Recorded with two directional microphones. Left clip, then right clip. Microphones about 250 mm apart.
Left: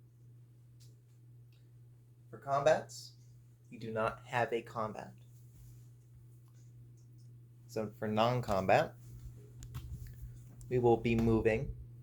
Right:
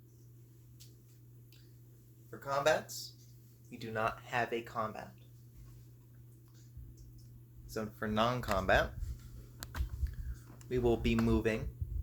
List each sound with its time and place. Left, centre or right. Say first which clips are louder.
2.5 s speech: left 1 dB; right
3.7 s speech: even; centre
4.3 s speech: left 1 dB; centre
7.7 s speech: left 1 dB; centre
10.7 s speech: left 3 dB; centre